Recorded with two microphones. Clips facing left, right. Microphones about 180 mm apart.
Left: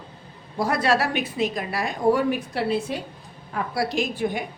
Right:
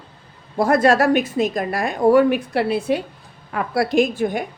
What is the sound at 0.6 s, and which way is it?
A woman's voice, 50° right (ahead or behind).